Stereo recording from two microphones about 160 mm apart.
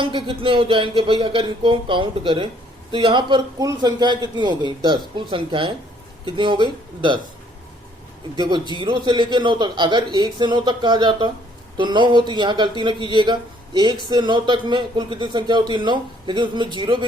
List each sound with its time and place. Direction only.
0.0 s a man's voice: 30° right (ahead or behind)
8.4 s a man's voice: 25° right (ahead or behind)